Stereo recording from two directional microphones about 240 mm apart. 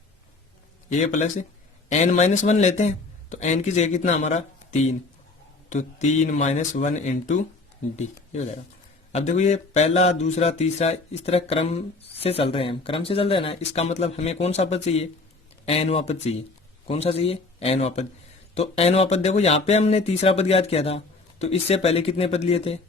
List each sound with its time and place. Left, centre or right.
0.9 s a man's voice: left